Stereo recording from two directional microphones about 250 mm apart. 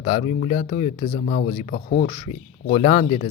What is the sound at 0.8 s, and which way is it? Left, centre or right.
Speech, left.